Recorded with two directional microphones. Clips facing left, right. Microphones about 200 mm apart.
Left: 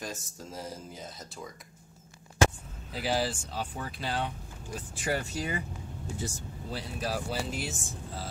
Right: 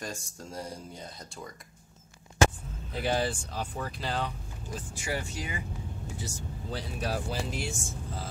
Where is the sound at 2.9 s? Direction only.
5° left (ahead or behind).